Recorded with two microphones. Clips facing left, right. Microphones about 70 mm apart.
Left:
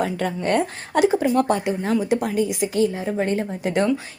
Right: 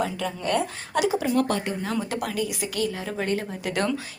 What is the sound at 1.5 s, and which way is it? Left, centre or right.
Speech, centre.